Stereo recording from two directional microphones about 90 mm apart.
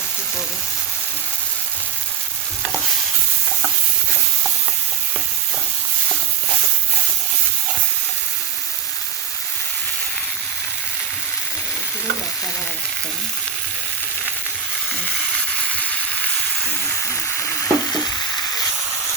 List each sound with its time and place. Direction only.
15.7 s frying: 15° left (ahead or behind)
17.3 s stir: 30° left (ahead or behind)